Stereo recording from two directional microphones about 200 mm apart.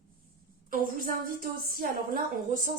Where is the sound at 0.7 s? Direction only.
45° right (ahead or behind).